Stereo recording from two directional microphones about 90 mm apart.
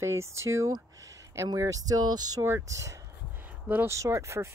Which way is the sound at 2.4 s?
35° right (ahead or behind).